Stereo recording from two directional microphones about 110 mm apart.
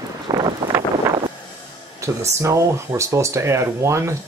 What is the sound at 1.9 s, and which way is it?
Speech, 25° right (ahead or behind).